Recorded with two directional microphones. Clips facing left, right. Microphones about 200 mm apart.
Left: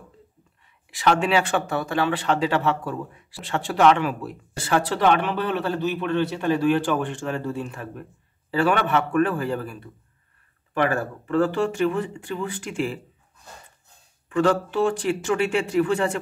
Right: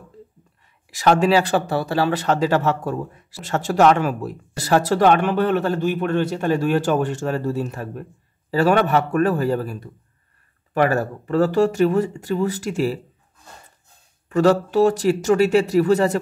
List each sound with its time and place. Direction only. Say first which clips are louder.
0.9 s speech: right 4 dB; 40° right (ahead or behind)
14.3 s speech: right 5 dB; 40° right (ahead or behind)